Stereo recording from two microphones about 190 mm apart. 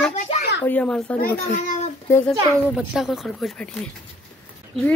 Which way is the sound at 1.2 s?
50° left (ahead or behind).